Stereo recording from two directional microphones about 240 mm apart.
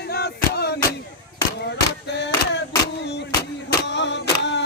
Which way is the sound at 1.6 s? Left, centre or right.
Left.